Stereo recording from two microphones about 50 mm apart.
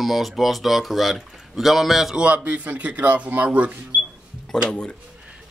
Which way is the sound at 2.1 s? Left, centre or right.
Right.